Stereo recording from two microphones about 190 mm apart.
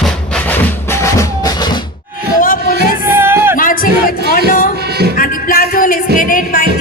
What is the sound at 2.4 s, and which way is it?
Music, 45° left (ahead or behind).